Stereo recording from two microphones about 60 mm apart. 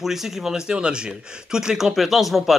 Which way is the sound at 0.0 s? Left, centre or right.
Centre.